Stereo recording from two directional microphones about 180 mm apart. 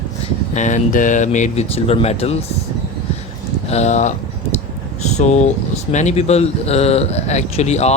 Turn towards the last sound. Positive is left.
turn(degrees=40)  # may be behind; listen again after turning